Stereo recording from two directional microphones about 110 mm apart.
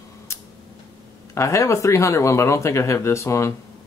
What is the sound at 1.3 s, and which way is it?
Speech, 25° left (ahead or behind).